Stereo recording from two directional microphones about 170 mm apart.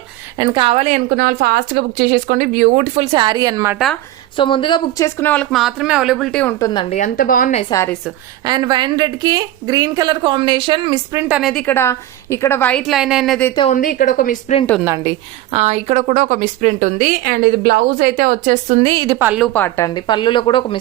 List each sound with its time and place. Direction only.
0.3 s a woman's voice: 25° right (ahead or behind); by 3.1 s 45° right (ahead or behind)
3.1 s a woman's voice: 25° right (ahead or behind)
4.4 s a woman's voice: 30° left (ahead or behind); by 6.6 s 5° left (ahead or behind)
6.6 s speech: 25° left (ahead or behind)
6.9 s a woman's voice: 50° left (ahead or behind)
8.4 s a woman's voice: 25° right (ahead or behind)
11.1 s a woman's voice: 10° right (ahead or behind)
11.6 s a woman's voice: 15° left (ahead or behind); by 13.4 s centre (ahead or behind)
13.7 s a woman's voice: 55° left (ahead or behind)
14.8 s a woman's voice: 15° right (ahead or behind)
15.5 s a woman's voice: 40° right (ahead or behind)
18.9 s a woman's voice: 25° right (ahead or behind)
19.5 s speech: 15° left (ahead or behind)